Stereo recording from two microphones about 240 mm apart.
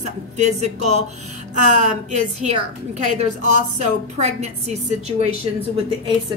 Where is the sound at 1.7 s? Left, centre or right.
Right.